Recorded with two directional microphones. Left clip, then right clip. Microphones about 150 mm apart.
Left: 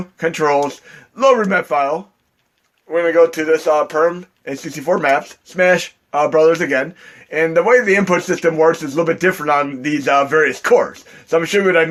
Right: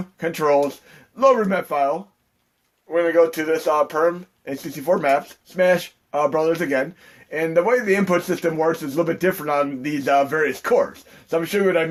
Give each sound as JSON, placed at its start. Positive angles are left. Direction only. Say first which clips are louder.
{"t": 0.2, "sound": "speech", "louder": "left 3 dB", "side_deg": 35}